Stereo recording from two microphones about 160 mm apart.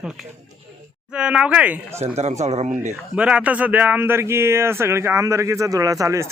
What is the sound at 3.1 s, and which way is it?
A man's voice, 5° right (ahead or behind).